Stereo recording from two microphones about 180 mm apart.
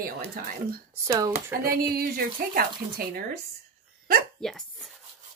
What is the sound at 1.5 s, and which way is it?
A woman's voice, 55° right (ahead or behind).